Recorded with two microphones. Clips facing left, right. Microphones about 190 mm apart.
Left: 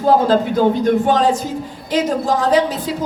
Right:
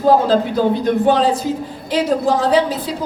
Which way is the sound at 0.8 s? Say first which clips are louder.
Even; 45° left (ahead or behind).